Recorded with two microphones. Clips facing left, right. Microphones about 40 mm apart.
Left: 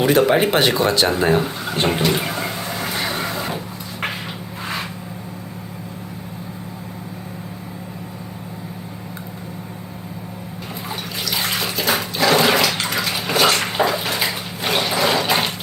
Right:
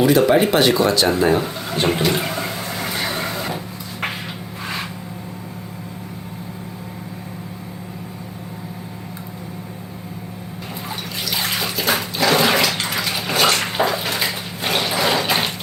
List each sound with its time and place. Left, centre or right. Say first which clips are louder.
0.0 s speech: right 1 dB; left
1.4 s speech: left 1 dB; centre
1.9 s a sound: right 1 dB; centre
10.8 s bathtub: left 1 dB; centre